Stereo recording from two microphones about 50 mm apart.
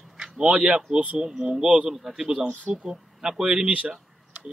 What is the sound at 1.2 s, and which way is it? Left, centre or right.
Speech, centre.